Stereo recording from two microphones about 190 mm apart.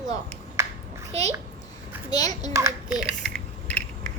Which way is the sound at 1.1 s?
35° right (ahead or behind).